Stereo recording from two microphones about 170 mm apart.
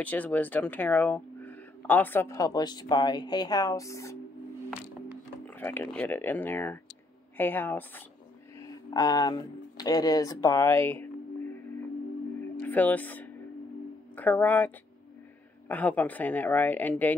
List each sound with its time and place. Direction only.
0.0 s speech: 10° left (ahead or behind)
5.5 s speech: 10° left (ahead or behind)
8.5 s speech: 25° left (ahead or behind)
12.5 s speech: 10° left (ahead or behind)
15.7 s speech: 10° left (ahead or behind)